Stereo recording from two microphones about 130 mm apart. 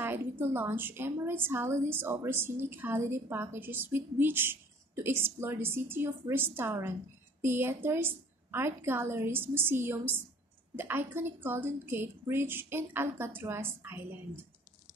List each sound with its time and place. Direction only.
0.0 s a woman's voice: 15° right (ahead or behind)